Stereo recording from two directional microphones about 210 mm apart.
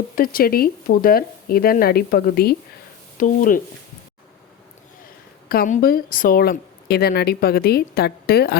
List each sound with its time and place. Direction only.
0.2 s a woman's voice: 45° left (ahead or behind)
5.5 s a woman's voice: 40° left (ahead or behind)